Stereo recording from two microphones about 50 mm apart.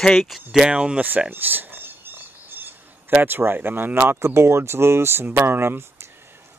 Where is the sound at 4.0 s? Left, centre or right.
Right.